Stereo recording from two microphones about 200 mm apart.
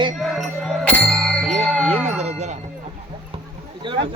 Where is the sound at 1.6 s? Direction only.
5° right (ahead or behind).